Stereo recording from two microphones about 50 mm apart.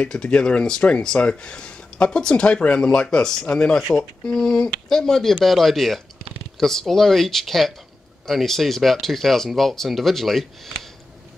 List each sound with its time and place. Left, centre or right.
0.0 s speech: centre